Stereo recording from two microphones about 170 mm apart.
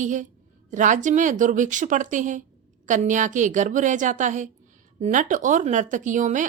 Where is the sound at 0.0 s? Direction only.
45° right (ahead or behind).